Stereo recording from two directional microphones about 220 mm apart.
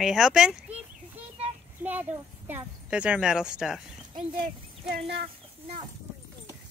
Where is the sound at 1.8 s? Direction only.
10° right (ahead or behind).